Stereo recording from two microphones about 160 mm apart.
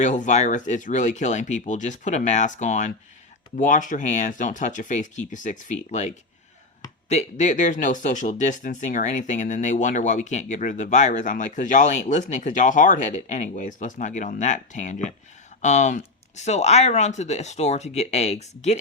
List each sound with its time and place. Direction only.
0.0 s speech: 50° left (ahead or behind)
7.1 s speech: 50° left (ahead or behind)